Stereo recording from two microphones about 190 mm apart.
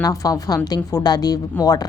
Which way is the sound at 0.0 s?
20° left (ahead or behind).